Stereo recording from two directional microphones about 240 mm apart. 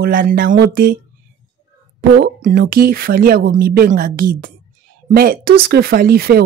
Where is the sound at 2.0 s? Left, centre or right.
Right.